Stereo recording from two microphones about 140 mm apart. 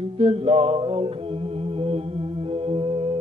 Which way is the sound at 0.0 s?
45° right (ahead or behind).